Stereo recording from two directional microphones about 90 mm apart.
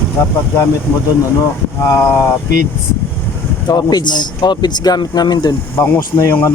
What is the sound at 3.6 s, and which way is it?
Speech, 50° left (ahead or behind).